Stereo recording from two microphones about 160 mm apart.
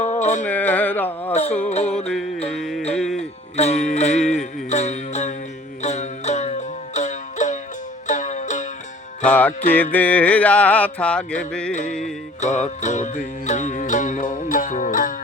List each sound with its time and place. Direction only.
0.0 s music: 45° left (ahead or behind)
0.4 s a sound: 10° left (ahead or behind)
1.3 s music: 45° left (ahead or behind)
2.0 s music: 5° left (ahead or behind)
3.6 s music: 45° left (ahead or behind)
9.2 s music: 10° left (ahead or behind)
9.7 s a sound: 10° left (ahead or behind)
11.7 s music: 50° left (ahead or behind)